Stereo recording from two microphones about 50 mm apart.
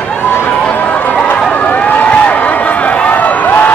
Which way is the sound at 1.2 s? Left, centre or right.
Left.